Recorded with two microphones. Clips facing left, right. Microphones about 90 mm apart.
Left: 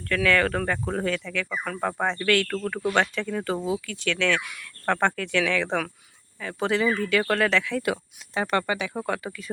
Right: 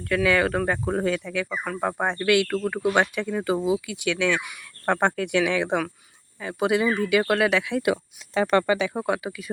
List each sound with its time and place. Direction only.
0.0 s speech: 10° right (ahead or behind)
8.3 s speech: 35° right (ahead or behind)
9.0 s speech: 10° right (ahead or behind)